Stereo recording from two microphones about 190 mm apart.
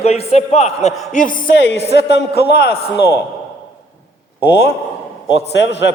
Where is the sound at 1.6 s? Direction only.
65° left (ahead or behind).